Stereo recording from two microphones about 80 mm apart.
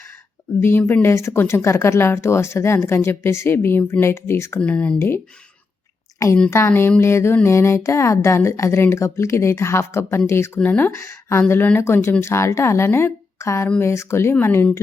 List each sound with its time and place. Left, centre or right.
0.6 s speech: left
4.6 s speech: centre
6.5 s speech: left
10.6 s speech: left
10.9 s speech: left